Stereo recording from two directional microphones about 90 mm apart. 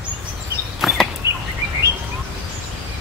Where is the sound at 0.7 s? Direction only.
Centre (ahead or behind).